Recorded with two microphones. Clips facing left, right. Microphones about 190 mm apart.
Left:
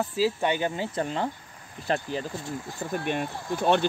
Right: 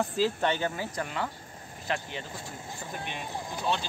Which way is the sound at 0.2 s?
10° left (ahead or behind).